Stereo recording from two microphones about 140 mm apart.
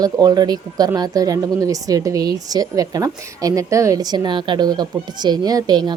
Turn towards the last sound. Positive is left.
turn(degrees=-30)  # may be behind; listen again after turning